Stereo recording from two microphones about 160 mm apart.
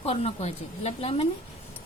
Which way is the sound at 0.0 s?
40° left (ahead or behind).